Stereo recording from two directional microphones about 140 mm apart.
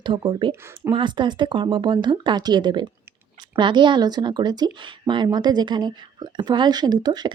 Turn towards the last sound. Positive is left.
turn(degrees=-30)  # may be behind; listen again after turning